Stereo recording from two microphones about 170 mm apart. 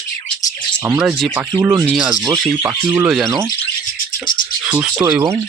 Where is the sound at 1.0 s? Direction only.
5° right (ahead or behind).